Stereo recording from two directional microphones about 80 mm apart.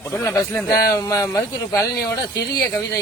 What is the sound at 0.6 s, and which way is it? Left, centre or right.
Speech, left.